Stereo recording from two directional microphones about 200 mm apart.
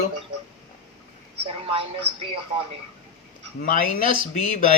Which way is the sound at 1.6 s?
25° right (ahead or behind).